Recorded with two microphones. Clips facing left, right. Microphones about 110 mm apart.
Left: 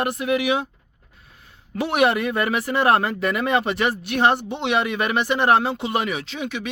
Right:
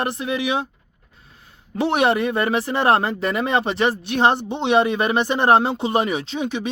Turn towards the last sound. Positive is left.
turn(degrees=-30)  # may be behind; listen again after turning